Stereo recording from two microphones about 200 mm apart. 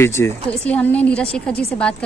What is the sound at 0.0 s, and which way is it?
A woman's voice, 10° left (ahead or behind).